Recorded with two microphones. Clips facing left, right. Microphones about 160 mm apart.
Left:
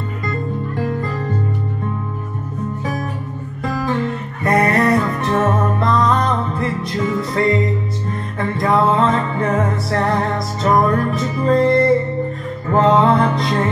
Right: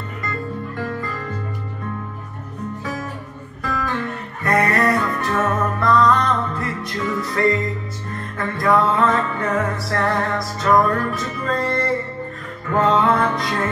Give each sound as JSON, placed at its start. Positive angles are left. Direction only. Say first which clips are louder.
{"t": 0.7, "sound": "music", "louder": "left 6 dB", "side_deg": 30}
{"t": 3.6, "sound": "music", "louder": "left 4 dB", "side_deg": 25}